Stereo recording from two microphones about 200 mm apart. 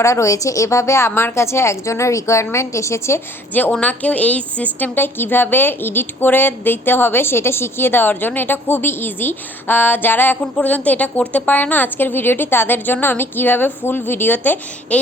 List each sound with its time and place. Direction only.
0.0 s a woman's voice: 15° left (ahead or behind)